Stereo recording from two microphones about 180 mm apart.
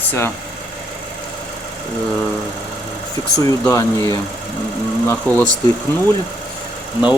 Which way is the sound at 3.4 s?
20° left (ahead or behind).